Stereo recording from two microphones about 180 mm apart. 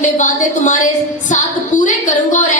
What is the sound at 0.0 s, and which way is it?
Speech, 45° left (ahead or behind).